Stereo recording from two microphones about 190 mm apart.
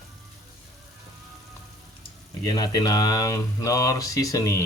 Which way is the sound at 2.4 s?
20° left (ahead or behind).